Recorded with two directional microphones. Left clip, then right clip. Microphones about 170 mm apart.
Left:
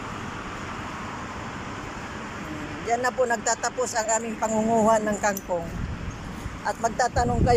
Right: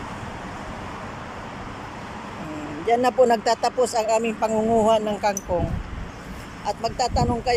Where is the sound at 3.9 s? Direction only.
15° right (ahead or behind).